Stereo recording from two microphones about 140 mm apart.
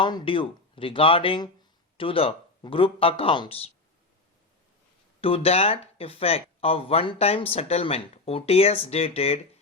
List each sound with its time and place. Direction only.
0.0 s speech: 35° left (ahead or behind)
5.2 s speech: 45° left (ahead or behind)